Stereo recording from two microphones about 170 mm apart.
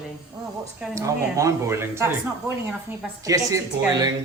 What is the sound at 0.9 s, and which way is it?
Speech, 20° right (ahead or behind).